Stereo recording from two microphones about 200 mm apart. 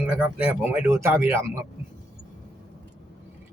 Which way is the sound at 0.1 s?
10° right (ahead or behind).